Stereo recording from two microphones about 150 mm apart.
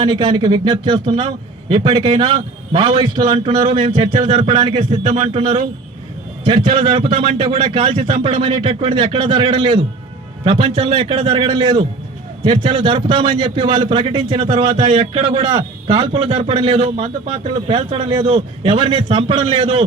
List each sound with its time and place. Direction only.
0.0 s a man's voice: 30° right (ahead or behind)